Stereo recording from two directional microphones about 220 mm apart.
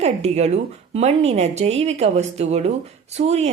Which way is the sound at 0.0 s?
30° right (ahead or behind).